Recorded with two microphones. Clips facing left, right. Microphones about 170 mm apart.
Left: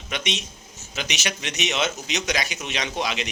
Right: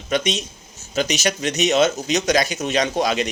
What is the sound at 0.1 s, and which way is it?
Speech, 40° right (ahead or behind).